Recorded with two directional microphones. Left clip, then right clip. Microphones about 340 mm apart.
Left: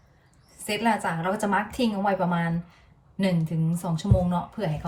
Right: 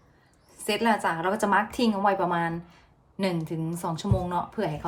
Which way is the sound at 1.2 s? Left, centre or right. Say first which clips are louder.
Right 2 dB; centre.